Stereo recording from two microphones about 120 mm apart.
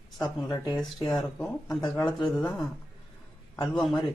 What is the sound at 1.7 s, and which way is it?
Speech, 30° left (ahead or behind).